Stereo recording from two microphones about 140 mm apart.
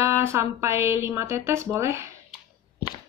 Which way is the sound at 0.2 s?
20° right (ahead or behind).